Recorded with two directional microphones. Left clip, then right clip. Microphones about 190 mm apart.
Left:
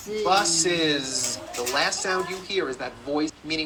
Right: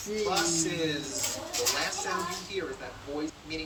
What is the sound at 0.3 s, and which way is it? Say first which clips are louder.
Speech: left 9 dB; 55° left (ahead or behind).